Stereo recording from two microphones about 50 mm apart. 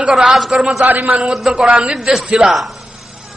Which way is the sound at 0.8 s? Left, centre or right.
Right.